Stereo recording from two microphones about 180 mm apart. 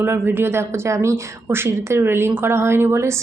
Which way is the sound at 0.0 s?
10° right (ahead or behind).